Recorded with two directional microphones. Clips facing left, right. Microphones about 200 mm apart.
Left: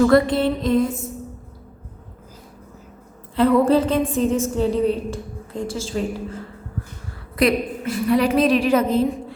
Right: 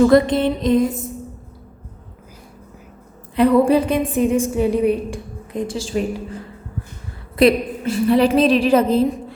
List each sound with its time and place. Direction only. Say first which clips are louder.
0.0 s a woman's voice: right 2 dB; 20° right (ahead or behind)
3.3 s a woman's voice: right 2 dB; 15° right (ahead or behind)
7.3 s a woman's voice: right 4 dB; 30° right (ahead or behind)